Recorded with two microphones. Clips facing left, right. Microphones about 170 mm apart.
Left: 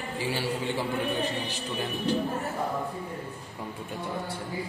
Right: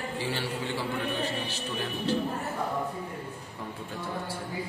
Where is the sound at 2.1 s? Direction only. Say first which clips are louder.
Left 1 dB; 15° left (ahead or behind).